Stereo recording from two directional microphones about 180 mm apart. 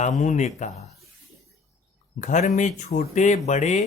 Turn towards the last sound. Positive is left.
turn(degrees=40)  # may be behind; listen again after turning